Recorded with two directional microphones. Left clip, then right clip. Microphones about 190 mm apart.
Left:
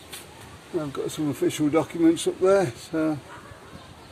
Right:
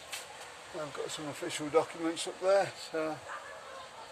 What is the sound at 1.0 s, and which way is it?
Speech, 35° left (ahead or behind).